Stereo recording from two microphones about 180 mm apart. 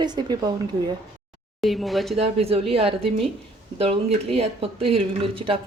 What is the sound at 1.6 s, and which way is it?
Speech, centre (ahead or behind).